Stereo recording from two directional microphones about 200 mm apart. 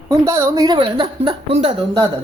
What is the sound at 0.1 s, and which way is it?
Speech, 15° right (ahead or behind).